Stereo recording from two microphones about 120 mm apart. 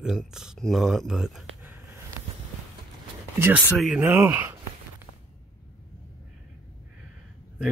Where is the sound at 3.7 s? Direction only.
Centre (ahead or behind).